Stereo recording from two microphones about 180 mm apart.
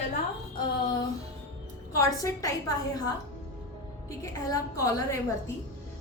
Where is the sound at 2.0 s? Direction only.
15° left (ahead or behind).